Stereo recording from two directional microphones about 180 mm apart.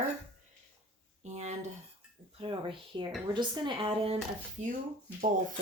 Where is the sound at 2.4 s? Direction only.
30° right (ahead or behind).